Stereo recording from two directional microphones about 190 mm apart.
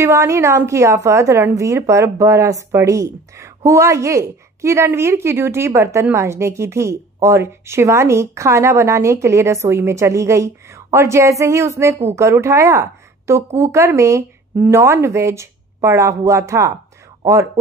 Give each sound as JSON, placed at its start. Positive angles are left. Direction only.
{"t": 0.0, "sound": "a woman's voice", "side_deg": -15}